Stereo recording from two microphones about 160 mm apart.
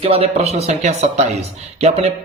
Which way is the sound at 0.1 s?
40° right (ahead or behind).